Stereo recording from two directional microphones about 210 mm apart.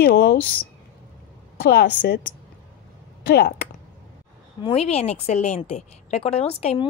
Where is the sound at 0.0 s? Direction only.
50° left (ahead or behind).